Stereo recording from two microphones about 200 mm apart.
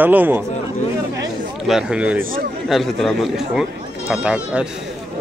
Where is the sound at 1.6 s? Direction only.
5° right (ahead or behind).